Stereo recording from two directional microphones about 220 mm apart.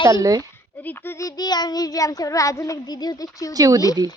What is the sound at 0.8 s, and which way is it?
Child singing, 10° left (ahead or behind).